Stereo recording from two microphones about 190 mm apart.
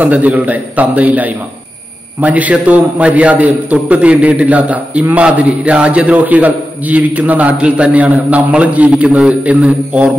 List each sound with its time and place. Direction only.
0.0 s a man's voice: 10° right (ahead or behind)